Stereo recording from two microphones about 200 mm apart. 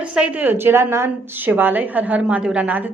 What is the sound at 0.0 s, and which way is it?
A woman's voice, 5° right (ahead or behind).